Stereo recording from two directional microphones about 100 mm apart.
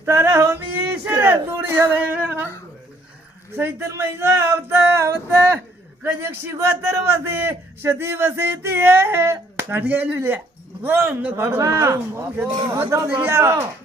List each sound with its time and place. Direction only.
0.0 s a man's voice: 25° right (ahead or behind)
3.5 s a man's voice: 30° right (ahead or behind)
12.5 s a man's voice: 45° right (ahead or behind)
12.9 s a man's voice: 30° right (ahead or behind)